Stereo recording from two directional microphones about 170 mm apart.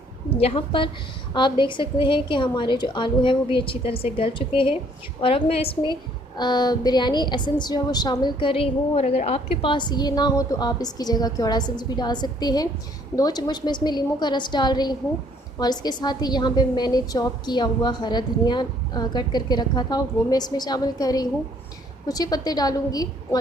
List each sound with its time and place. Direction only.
0.3 s a woman's voice: 35° left (ahead or behind)